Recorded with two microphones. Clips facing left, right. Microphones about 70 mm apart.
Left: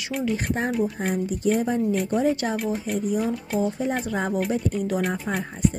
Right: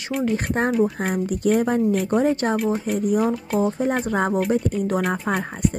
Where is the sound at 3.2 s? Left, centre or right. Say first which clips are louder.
Right 4 dB; centre.